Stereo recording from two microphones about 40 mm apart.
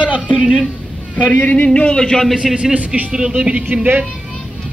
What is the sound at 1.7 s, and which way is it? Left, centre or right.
Speech, left.